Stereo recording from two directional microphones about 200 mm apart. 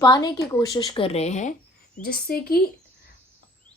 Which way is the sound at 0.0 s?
20° left (ahead or behind).